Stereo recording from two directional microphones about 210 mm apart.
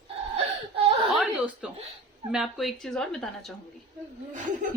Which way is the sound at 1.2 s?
5° right (ahead or behind).